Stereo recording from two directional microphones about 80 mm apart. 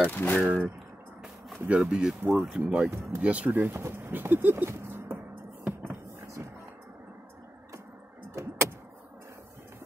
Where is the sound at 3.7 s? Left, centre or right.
Right.